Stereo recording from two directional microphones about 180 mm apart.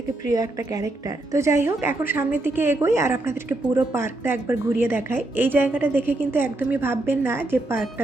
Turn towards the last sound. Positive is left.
turn(degrees=-10)  # may be behind; listen again after turning